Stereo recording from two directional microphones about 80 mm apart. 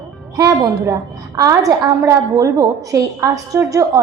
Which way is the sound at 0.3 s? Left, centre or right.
Right.